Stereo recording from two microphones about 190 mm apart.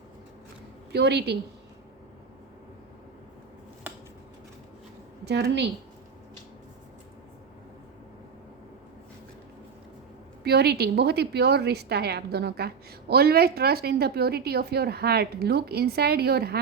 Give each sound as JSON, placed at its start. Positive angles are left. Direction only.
{"t": 0.9, "sound": "a woman's voice", "side_deg": -60}
{"t": 5.2, "sound": "a woman's voice", "side_deg": -60}
{"t": 10.4, "sound": "a woman's voice", "side_deg": -60}